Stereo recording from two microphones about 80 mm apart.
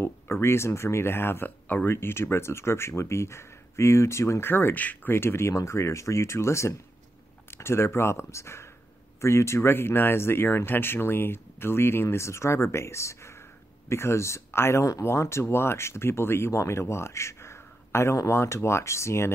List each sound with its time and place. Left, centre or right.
0.0 s speech: left